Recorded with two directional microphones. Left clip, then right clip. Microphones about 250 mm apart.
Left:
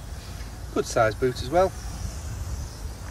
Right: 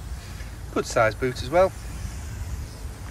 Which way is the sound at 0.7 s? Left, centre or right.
Centre.